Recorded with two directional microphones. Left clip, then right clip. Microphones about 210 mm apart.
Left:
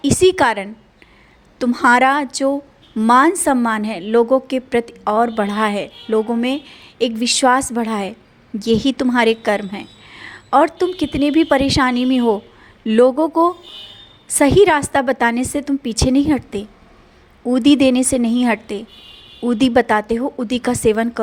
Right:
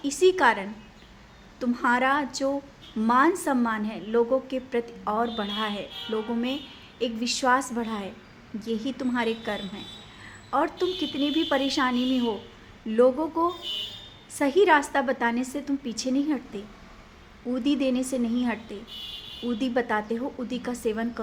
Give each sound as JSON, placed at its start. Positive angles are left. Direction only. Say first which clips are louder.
{"t": 0.0, "sound": "a woman's voice", "louder": "left 7 dB", "side_deg": 40}